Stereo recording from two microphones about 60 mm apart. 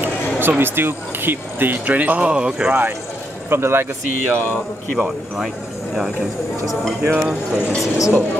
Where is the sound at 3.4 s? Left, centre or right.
Right.